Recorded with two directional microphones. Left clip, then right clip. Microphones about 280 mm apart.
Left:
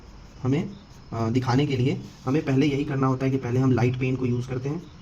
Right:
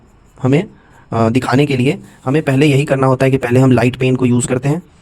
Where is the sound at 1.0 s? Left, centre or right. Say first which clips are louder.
Right 12 dB; right.